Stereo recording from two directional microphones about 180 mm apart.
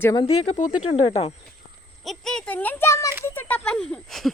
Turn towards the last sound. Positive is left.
turn(degrees=0)  # may be behind; listen again after turning